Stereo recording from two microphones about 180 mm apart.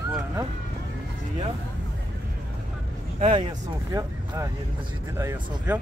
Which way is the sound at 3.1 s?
30° right (ahead or behind).